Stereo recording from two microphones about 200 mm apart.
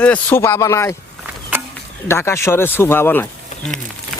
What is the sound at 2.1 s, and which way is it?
Speech, 10° left (ahead or behind).